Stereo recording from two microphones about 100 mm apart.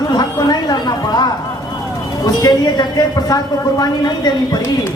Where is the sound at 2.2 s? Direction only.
40° left (ahead or behind).